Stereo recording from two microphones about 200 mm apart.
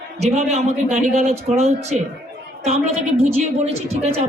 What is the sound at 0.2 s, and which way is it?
Speech, 35° right (ahead or behind).